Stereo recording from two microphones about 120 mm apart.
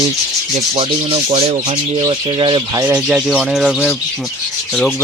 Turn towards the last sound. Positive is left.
turn(degrees=0)  # may be behind; listen again after turning